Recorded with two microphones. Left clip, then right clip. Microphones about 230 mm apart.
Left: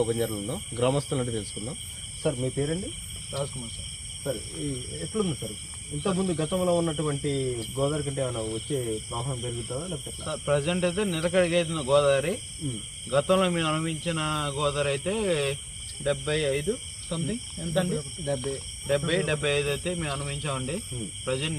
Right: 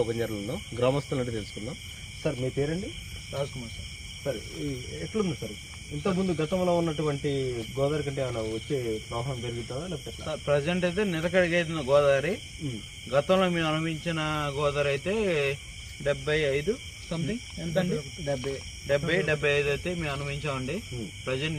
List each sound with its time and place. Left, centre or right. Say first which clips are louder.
0.0 s speech: left 2 dB; centre
6.0 s speech: even; centre